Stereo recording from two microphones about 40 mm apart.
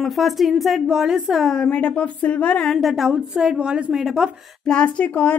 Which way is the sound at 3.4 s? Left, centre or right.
Right.